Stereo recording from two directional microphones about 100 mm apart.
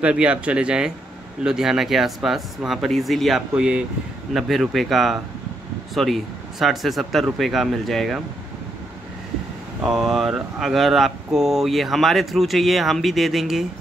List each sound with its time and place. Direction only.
0.0 s speech: 10° right (ahead or behind)
9.8 s speech: 5° right (ahead or behind)